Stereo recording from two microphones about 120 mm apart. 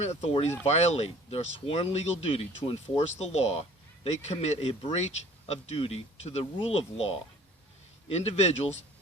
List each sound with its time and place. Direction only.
0.0 s speech: 60° left (ahead or behind)